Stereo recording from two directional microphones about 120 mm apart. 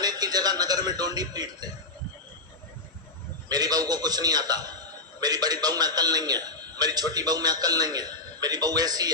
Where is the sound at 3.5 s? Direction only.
35° right (ahead or behind).